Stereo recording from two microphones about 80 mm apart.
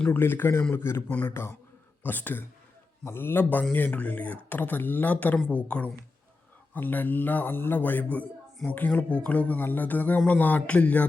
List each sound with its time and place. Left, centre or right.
0.1 s speech: left
2.0 s speech: left